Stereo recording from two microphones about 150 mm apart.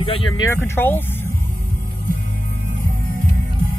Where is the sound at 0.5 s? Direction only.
15° left (ahead or behind).